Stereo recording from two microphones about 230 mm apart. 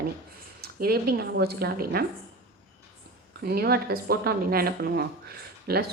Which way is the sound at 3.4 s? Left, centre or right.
Right.